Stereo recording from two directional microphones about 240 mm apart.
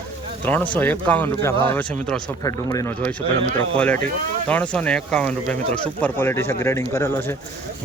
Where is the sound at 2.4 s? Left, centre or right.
Centre.